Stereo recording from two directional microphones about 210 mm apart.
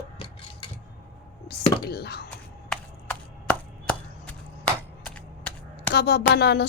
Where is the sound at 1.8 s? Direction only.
50° left (ahead or behind).